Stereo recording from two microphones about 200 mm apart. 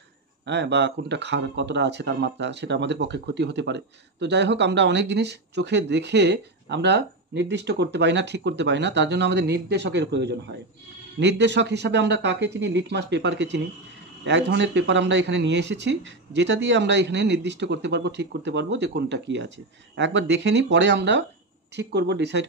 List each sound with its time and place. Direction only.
0.5 s speech: 60° right (ahead or behind)